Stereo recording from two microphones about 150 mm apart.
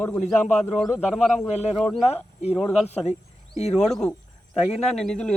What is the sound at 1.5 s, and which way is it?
Speech, 50° left (ahead or behind).